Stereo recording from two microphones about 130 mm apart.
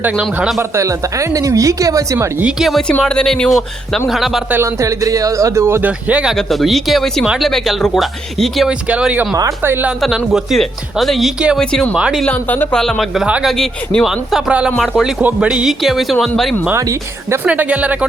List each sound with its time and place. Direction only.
0.0 s speech: 10° right (ahead or behind)
0.7 s speech: 25° right (ahead or behind)
2.4 s speech: 5° right (ahead or behind)
4.5 s speech: 20° right (ahead or behind)
6.3 s speech: centre (ahead or behind); by 9.9 s 15° right (ahead or behind)
10.0 s speech: centre (ahead or behind)
11.6 s speech: 5° left (ahead or behind)
11.9 s speech: 5° right (ahead or behind)
12.2 s speech: 10° left (ahead or behind)
16.7 s speech: 25° right (ahead or behind)